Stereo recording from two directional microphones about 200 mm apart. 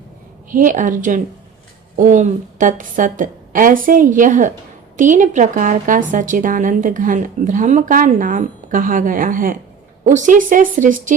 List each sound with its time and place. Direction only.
0.5 s a woman's voice: 40° right (ahead or behind)